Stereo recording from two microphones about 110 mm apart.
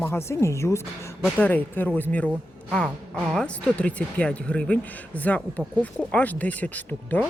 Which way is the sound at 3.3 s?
10° left (ahead or behind).